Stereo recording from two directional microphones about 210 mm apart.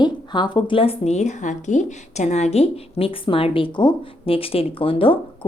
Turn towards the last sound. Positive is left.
turn(degrees=25)  # may be behind; listen again after turning